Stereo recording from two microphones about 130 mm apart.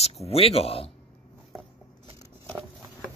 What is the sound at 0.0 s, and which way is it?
Speech, 50° left (ahead or behind).